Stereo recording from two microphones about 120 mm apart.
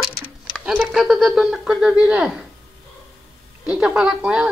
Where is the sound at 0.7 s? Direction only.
5° right (ahead or behind).